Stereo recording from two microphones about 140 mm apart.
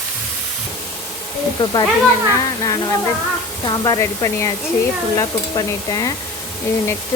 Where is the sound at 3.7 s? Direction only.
25° left (ahead or behind).